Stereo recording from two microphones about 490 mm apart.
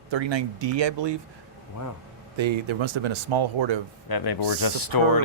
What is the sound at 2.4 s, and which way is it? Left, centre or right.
Speech, right.